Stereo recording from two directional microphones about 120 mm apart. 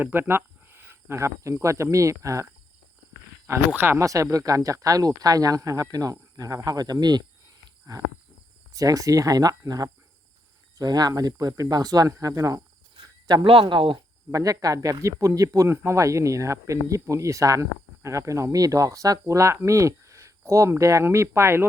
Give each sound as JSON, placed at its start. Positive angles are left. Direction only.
{"t": 0.0, "sound": "speech", "side_deg": -20}
{"t": 3.8, "sound": "speech", "side_deg": -20}
{"t": 13.2, "sound": "speech", "side_deg": -45}
{"t": 14.3, "sound": "speech", "side_deg": -30}